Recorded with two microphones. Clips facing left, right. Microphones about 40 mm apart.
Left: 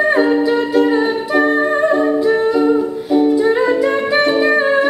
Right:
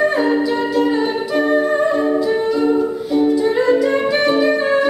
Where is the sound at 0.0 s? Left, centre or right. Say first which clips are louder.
Left 2 dB; centre.